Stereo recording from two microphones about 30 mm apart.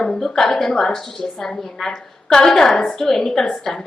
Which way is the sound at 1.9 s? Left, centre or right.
Left.